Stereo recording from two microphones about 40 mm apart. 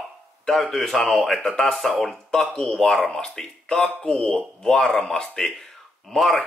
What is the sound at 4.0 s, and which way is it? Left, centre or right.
Speech, left.